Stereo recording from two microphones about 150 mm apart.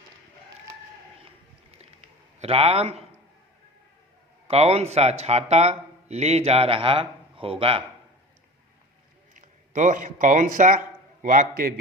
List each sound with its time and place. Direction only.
1.7 s a sound: 45° right (ahead or behind)
4.4 s speech: 45° right (ahead or behind)
9.3 s a man's voice: 60° right (ahead or behind)